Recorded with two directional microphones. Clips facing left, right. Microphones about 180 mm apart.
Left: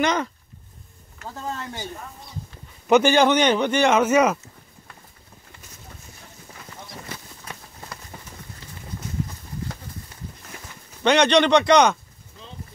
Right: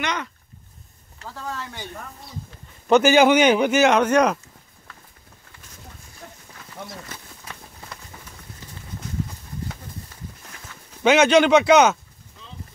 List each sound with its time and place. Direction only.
0.0 s speech: 40° left (ahead or behind)
1.2 s speech: 20° left (ahead or behind)
3.0 s a man's voice: 5° right (ahead or behind)
8.1 s run: 25° left (ahead or behind)
11.0 s a man's voice: 5° right (ahead or behind)